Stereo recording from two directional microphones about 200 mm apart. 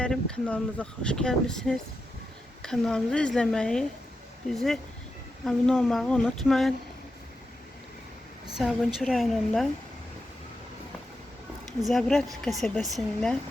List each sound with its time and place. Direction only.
0.0 s speech: 5° left (ahead or behind)
8.5 s speech: centre (ahead or behind)
11.9 s speech: centre (ahead or behind)